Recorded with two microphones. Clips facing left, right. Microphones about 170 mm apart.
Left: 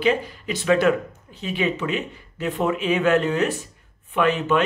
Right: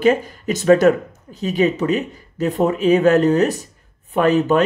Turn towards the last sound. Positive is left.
turn(degrees=-40)  # may be behind; listen again after turning